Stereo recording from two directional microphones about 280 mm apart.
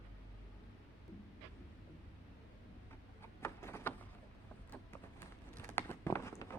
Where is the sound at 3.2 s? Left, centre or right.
Centre.